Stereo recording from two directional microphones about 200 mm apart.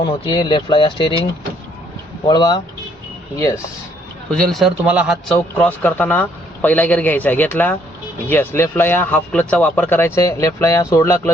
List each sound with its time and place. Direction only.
0.0 s speech: 25° left (ahead or behind)
2.2 s speech: 20° left (ahead or behind)
4.3 s speech: 5° left (ahead or behind)